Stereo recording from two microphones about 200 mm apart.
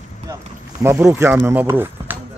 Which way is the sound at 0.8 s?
10° right (ahead or behind).